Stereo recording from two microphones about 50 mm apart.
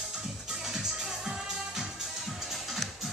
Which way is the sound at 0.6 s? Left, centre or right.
Centre.